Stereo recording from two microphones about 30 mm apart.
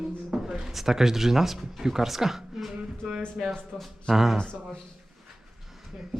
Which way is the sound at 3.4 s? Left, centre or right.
Right.